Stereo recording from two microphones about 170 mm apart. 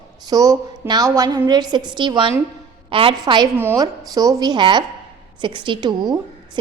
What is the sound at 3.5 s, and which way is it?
A woman's voice, 15° right (ahead or behind).